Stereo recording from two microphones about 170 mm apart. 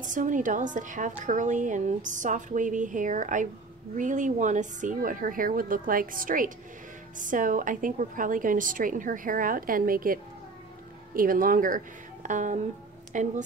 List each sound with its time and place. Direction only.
0.0 s a woman's voice: 50° right (ahead or behind)